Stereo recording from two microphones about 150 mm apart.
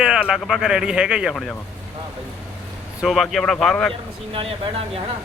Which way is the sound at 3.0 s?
Centre (ahead or behind).